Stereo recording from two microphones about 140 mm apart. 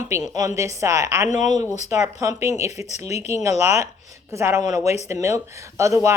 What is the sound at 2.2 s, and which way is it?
Speech, 20° right (ahead or behind).